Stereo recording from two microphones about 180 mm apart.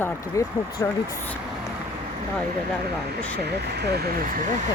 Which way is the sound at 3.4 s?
65° right (ahead or behind).